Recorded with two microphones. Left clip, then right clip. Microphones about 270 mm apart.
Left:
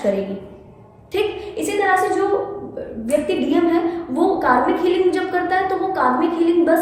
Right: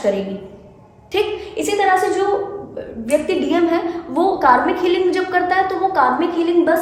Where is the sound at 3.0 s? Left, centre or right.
Right.